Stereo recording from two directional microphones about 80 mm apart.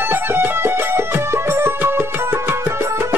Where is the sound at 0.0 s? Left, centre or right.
Right.